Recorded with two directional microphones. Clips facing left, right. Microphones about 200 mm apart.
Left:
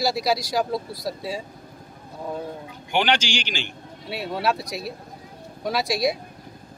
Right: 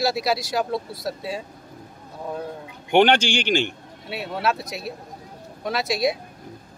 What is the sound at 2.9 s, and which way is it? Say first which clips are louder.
Speech: right 6 dB; 55° right (ahead or behind).